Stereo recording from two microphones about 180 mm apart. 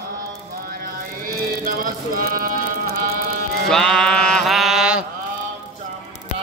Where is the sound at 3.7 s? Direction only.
5° left (ahead or behind).